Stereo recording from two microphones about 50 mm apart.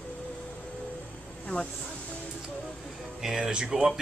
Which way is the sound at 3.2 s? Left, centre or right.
Centre.